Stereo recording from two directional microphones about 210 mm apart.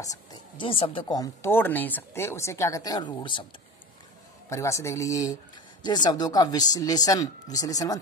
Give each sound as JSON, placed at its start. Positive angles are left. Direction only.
{"t": 0.0, "sound": "speech", "side_deg": 15}
{"t": 4.5, "sound": "speech", "side_deg": 15}